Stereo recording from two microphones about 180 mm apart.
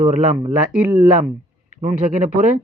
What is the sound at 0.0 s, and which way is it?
Speech, 40° right (ahead or behind).